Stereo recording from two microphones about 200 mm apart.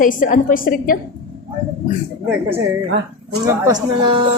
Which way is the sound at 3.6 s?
25° right (ahead or behind).